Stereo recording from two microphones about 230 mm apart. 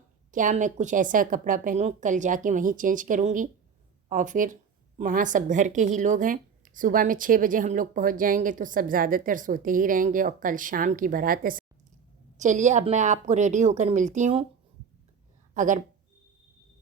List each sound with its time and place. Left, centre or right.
0.3 s speech: right
15.5 s a woman's voice: right